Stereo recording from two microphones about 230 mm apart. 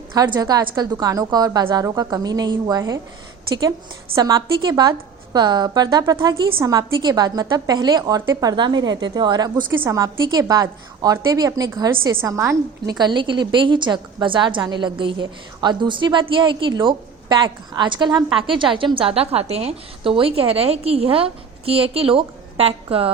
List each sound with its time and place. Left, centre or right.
0.1 s a woman's voice: centre